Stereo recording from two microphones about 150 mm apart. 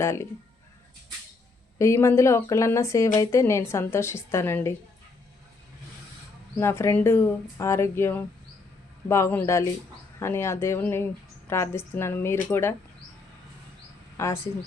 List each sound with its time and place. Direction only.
0.0 s a woman's voice: 15° left (ahead or behind)
1.8 s a woman's voice: 20° left (ahead or behind)
6.6 s a woman's voice: 15° left (ahead or behind)
14.2 s a woman's voice: 20° left (ahead or behind)